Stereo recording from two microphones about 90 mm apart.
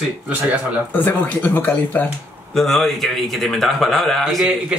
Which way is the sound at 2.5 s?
Centre (ahead or behind).